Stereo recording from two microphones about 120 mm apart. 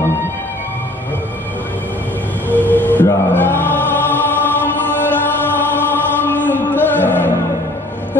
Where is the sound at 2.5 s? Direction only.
15° left (ahead or behind).